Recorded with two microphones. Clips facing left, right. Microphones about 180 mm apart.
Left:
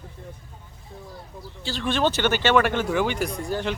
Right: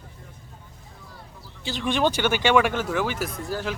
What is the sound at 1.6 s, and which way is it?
Speech, 15° right (ahead or behind).